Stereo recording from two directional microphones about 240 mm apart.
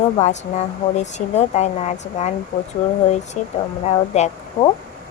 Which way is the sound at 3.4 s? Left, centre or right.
Left.